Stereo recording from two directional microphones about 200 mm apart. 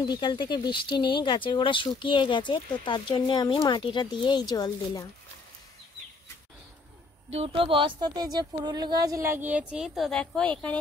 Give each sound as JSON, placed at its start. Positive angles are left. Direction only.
{"t": 0.1, "sound": "speech", "side_deg": 25}
{"t": 7.3, "sound": "speech", "side_deg": -25}